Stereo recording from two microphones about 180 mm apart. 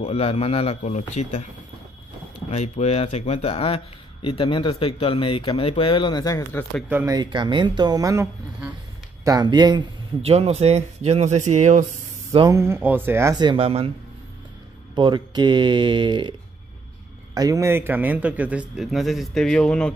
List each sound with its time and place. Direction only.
0.0 s a man's voice: 35° left (ahead or behind)
2.5 s speech: 40° left (ahead or behind); by 6.8 s 15° left (ahead or behind)
6.9 s a man's voice: 15° right (ahead or behind); by 12.4 s 40° right (ahead or behind)
12.4 s a man's voice: 15° right (ahead or behind); by 13.9 s 30° right (ahead or behind)
15.0 s a man's voice: 25° right (ahead or behind); by 19.9 s 5° left (ahead or behind)